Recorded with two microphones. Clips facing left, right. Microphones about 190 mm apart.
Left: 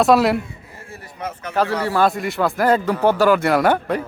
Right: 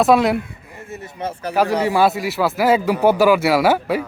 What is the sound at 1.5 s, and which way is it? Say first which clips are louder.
Speech: right 2 dB; 15° right (ahead or behind).